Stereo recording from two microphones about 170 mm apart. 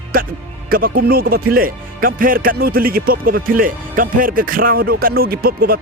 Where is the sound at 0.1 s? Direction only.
60° right (ahead or behind).